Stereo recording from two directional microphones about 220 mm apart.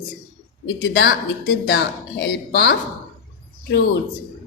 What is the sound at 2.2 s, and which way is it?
Speech, 50° left (ahead or behind).